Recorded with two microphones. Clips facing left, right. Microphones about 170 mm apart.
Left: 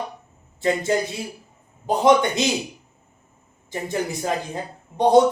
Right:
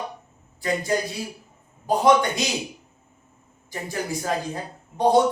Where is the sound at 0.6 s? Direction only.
25° left (ahead or behind).